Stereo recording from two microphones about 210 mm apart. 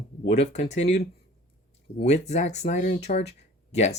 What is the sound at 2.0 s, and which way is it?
Speech, 35° left (ahead or behind).